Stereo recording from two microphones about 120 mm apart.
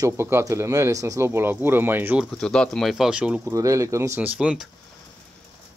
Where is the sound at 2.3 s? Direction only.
5° left (ahead or behind).